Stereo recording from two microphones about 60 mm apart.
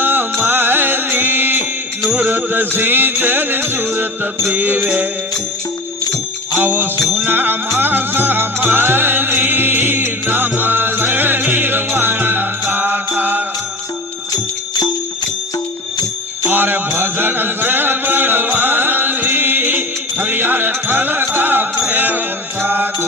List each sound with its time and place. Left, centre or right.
0.0 s music: right
4.5 s mantra: right
6.6 s mantra: right
7.8 s music: right
16.5 s mantra: right
21.2 s music: right